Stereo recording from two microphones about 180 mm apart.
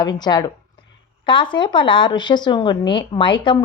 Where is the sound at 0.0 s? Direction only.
25° left (ahead or behind).